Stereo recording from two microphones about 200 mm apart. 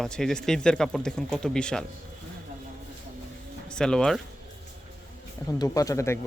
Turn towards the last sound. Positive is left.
turn(degrees=15)  # may be behind; listen again after turning